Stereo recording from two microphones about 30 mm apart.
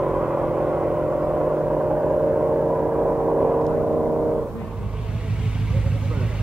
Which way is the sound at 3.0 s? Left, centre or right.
Right.